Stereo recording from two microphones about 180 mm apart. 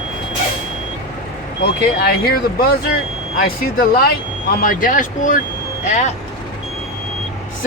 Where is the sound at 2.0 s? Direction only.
55° left (ahead or behind).